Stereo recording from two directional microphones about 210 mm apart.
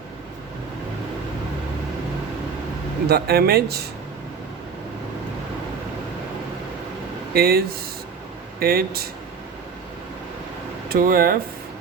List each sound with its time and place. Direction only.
3.1 s speech: 50° right (ahead or behind)
7.3 s speech: 45° right (ahead or behind)
10.8 s speech: 45° right (ahead or behind)